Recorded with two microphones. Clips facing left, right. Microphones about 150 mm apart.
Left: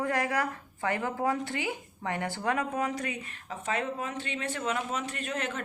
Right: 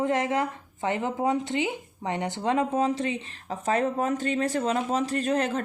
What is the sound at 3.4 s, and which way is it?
Speech, 40° right (ahead or behind).